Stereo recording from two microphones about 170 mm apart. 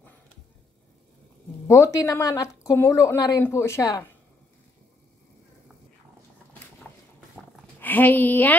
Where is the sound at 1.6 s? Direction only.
15° left (ahead or behind).